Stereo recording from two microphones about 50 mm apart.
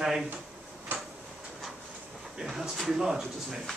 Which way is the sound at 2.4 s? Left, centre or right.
Centre.